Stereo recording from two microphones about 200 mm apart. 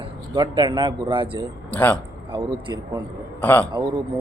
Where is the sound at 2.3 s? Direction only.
25° right (ahead or behind).